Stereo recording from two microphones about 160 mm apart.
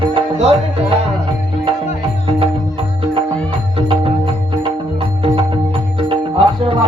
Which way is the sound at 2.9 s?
35° right (ahead or behind).